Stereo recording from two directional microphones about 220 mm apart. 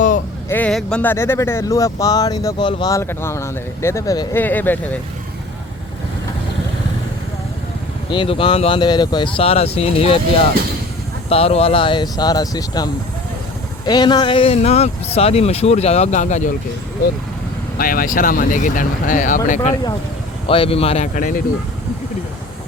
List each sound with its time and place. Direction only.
0.4 s speech: 10° left (ahead or behind)
8.1 s speech: 25° left (ahead or behind)
11.3 s speech: 25° left (ahead or behind)
17.7 s speech: 40° left (ahead or behind)
20.5 s speech: 25° left (ahead or behind)